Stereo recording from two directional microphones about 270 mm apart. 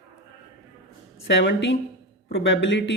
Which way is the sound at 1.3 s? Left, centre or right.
Left.